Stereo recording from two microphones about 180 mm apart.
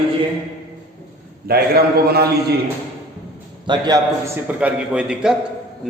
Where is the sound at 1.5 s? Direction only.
60° right (ahead or behind).